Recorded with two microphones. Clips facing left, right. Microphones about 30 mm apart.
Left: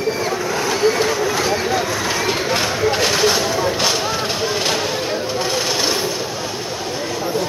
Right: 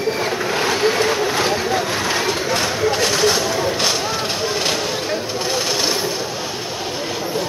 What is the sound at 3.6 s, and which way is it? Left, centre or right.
Vehicle, centre.